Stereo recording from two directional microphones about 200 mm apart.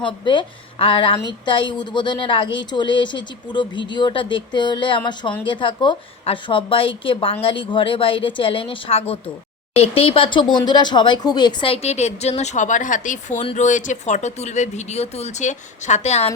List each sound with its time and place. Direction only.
0.0 s a woman's voice: 25° left (ahead or behind)